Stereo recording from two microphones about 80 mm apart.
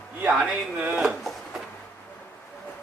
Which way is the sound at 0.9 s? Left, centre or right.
Centre.